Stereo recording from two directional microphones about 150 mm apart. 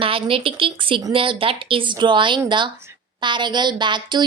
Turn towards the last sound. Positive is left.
turn(degrees=-30)  # may be behind; listen again after turning